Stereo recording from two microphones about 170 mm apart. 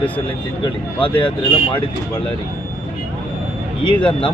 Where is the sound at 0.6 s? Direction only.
30° left (ahead or behind).